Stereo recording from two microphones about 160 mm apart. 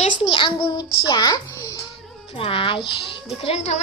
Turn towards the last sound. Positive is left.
turn(degrees=45)  # may be behind; listen again after turning